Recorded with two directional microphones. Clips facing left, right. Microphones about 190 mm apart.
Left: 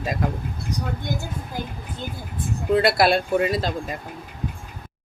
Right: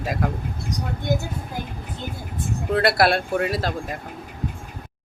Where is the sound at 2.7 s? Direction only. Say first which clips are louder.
Left 1 dB; centre (ahead or behind).